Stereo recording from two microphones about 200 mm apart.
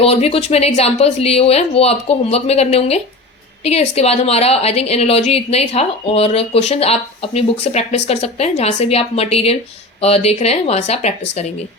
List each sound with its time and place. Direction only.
0.0 s a woman's voice: 30° left (ahead or behind)